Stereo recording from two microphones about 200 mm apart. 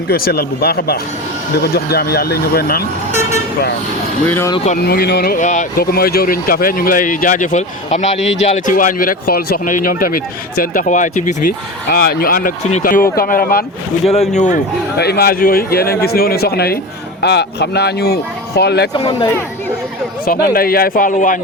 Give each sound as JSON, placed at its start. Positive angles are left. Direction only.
{"t": 0.1, "sound": "speech", "side_deg": 50}
{"t": 4.3, "sound": "speech", "side_deg": 10}
{"t": 4.5, "sound": "speech", "side_deg": 35}
{"t": 4.8, "sound": "speech", "side_deg": 55}
{"t": 14.1, "sound": "speech", "side_deg": 35}
{"t": 14.9, "sound": "speech", "side_deg": 55}
{"t": 18.9, "sound": "speech", "side_deg": 25}
{"t": 20.2, "sound": "speech", "side_deg": 45}